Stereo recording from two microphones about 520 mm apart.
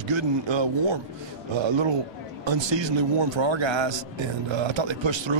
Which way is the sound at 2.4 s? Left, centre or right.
Right.